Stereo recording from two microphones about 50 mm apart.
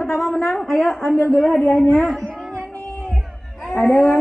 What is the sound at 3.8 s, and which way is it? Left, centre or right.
Cattle, left.